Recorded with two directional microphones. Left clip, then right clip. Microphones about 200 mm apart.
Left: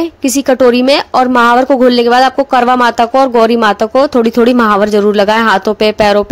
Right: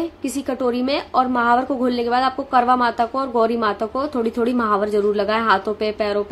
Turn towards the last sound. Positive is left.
turn(degrees=50)  # may be behind; listen again after turning